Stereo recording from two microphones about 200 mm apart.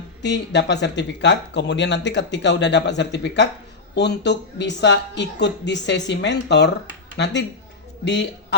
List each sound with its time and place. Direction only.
0.2 s a man's voice: 60° left (ahead or behind)